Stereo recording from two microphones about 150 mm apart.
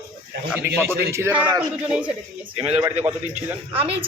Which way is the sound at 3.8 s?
40° right (ahead or behind).